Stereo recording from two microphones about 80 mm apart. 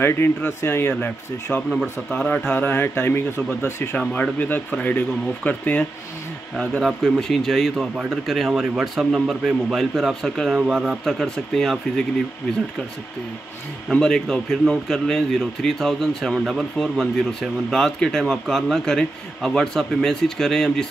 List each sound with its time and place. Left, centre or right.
0.2 s speech: left
1.7 s speech: centre
6.8 s a man's voice: centre
10.6 s speech: centre
11.1 s a man's voice: centre
13.8 s a man's voice: centre